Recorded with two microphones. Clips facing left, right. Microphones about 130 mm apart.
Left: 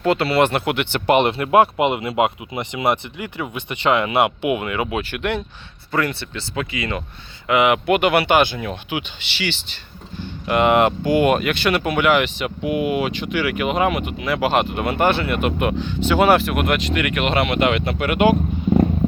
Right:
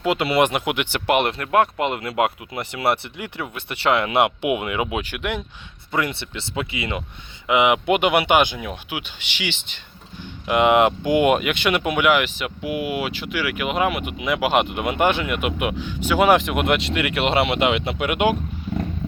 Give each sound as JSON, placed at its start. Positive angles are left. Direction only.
{"t": 0.0, "sound": "speech", "side_deg": -15}
{"t": 1.4, "sound": "speech", "side_deg": 10}
{"t": 4.4, "sound": "speech", "side_deg": -10}
{"t": 5.9, "sound": "speech", "side_deg": -20}
{"t": 8.5, "sound": "speech", "side_deg": -5}